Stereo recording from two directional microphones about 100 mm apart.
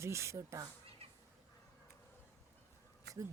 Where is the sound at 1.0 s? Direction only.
90° right.